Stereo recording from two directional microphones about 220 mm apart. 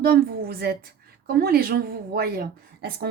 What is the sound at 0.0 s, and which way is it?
A woman's voice, 45° right (ahead or behind).